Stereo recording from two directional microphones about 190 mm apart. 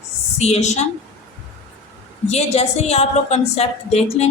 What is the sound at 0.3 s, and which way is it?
Speech, 35° left (ahead or behind).